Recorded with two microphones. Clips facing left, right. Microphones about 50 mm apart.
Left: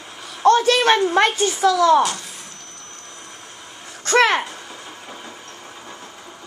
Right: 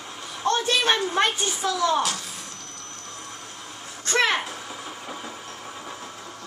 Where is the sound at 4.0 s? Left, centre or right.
Left.